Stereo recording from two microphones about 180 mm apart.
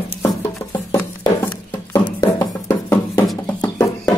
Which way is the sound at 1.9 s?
20° left (ahead or behind).